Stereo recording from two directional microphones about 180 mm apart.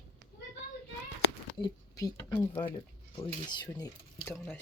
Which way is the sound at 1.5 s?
25° left (ahead or behind).